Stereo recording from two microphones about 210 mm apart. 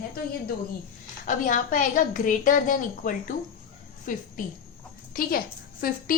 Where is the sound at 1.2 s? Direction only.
40° left (ahead or behind).